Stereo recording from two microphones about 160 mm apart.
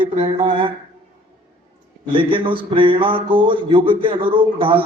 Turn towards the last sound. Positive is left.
turn(degrees=-35)  # may be behind; listen again after turning